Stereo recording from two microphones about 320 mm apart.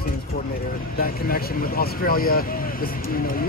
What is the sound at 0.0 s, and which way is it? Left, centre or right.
Speech, left.